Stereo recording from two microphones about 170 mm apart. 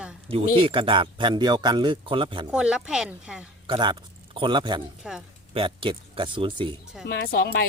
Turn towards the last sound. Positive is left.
turn(degrees=65)  # may be behind; listen again after turning